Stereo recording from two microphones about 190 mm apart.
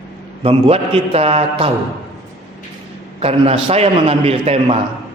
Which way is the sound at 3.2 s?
30° right (ahead or behind).